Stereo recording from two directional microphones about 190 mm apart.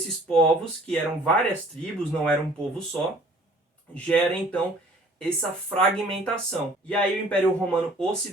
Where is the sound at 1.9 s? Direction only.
5° left (ahead or behind).